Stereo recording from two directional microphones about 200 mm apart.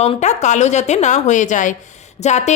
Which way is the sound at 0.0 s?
35° left (ahead or behind).